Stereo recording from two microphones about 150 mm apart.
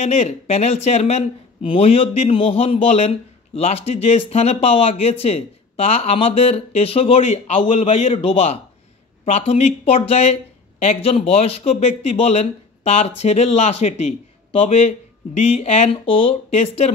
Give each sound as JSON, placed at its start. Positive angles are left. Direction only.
{"t": 0.0, "sound": "speech", "side_deg": 50}